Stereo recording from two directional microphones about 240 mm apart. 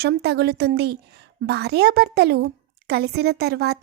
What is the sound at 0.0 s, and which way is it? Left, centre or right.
A woman's voice, right.